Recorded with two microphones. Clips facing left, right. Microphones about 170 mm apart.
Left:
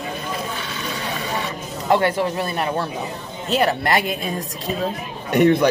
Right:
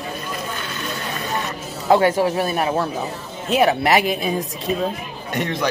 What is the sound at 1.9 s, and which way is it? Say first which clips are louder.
A woman's voice: right 3 dB; 10° right (ahead or behind).